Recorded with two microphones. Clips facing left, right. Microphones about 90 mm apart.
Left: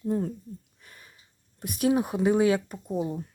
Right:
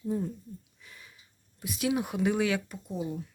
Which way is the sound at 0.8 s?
45° left (ahead or behind).